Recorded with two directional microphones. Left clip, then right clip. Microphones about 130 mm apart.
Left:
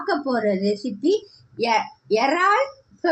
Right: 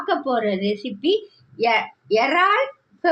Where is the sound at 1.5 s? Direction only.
45° left (ahead or behind).